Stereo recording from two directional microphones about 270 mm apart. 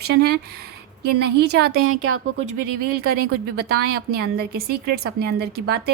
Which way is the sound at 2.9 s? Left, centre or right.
Right.